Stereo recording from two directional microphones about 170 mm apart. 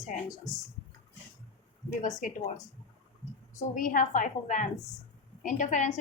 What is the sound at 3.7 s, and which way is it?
A woman's voice, 50° left (ahead or behind).